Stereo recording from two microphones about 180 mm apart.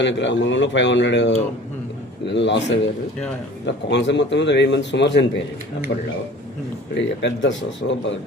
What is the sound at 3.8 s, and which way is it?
Speech, 75° left (ahead or behind).